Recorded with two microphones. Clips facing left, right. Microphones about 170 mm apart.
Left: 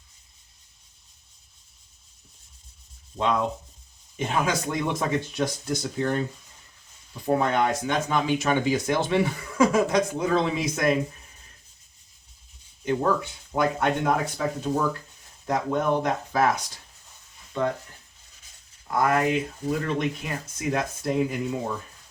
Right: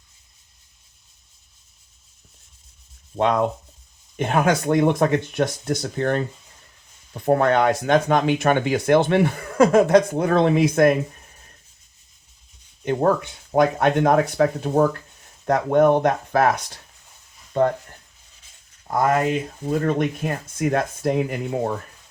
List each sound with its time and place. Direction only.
4.2 s speech: 60° right (ahead or behind)
12.8 s speech: 55° right (ahead or behind)
18.9 s speech: 30° right (ahead or behind)
19.7 s speech: 50° right (ahead or behind)